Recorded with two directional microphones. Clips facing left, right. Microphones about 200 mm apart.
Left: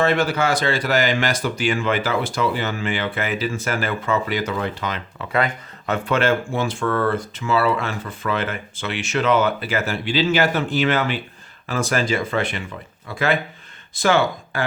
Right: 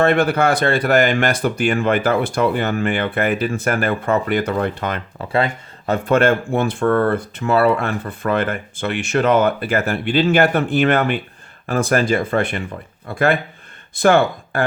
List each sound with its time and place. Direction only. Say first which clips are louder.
0.0 s speech: right 4 dB; 55° right (ahead or behind)
5.1 s speech: right 2 dB; 30° right (ahead or behind)
6.1 s speech: right 5 dB; 50° right (ahead or behind)